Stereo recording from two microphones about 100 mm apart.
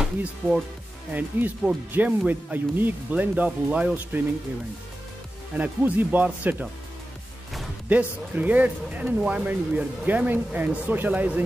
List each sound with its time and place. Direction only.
0.0 s speech: 5° right (ahead or behind)
1.1 s speech: 15° right (ahead or behind)
5.6 s speech: 15° right (ahead or behind)
7.9 s speech: 15° right (ahead or behind)